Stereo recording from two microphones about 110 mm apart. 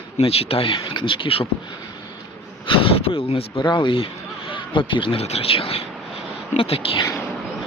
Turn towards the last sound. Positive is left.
turn(degrees=60)  # may be behind; listen again after turning